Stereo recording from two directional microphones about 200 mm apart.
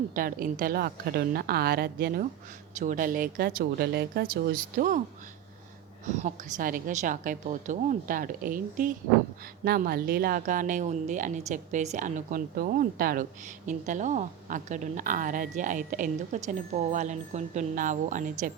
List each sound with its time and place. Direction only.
0.1 s speech: 45° right (ahead or behind)
6.1 s a woman's voice: 40° right (ahead or behind)